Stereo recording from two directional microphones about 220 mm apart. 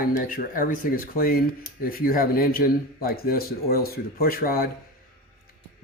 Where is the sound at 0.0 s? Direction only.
40° left (ahead or behind).